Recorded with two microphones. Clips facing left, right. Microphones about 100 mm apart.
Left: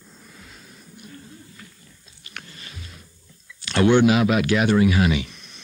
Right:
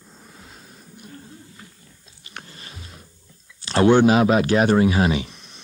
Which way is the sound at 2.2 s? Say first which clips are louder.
Right 1 dB; 30° right (ahead or behind).